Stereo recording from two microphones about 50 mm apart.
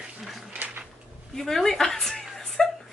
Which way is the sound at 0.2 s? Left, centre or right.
Centre.